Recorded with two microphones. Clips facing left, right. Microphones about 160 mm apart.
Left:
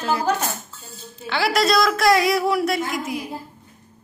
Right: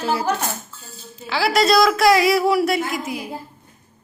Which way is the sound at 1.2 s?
Centre (ahead or behind).